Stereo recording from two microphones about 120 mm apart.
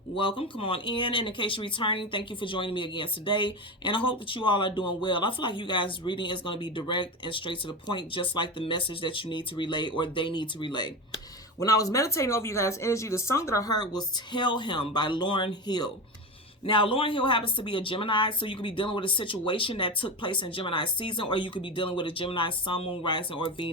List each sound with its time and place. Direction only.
0.2 s speech: 45° left (ahead or behind)